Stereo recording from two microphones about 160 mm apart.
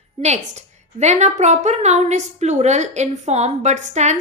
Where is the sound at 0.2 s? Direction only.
45° right (ahead or behind).